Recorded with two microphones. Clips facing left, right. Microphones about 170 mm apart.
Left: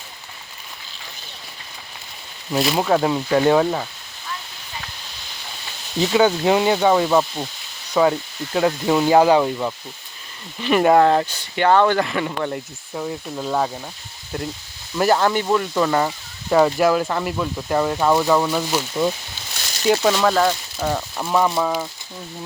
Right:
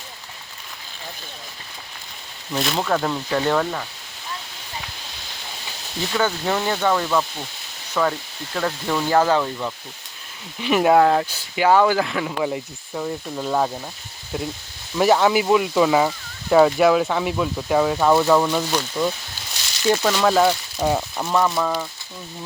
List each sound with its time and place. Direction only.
2.5 s speech: 5° left (ahead or behind)
6.0 s speech: 15° left (ahead or behind)
10.6 s speech: 5° right (ahead or behind)
21.2 s speech: 10° left (ahead or behind)